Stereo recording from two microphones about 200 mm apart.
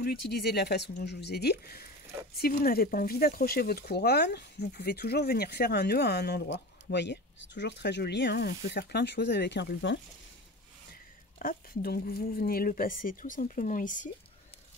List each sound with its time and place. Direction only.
0.0 s speech: 50° left (ahead or behind)
11.3 s speech: 45° left (ahead or behind)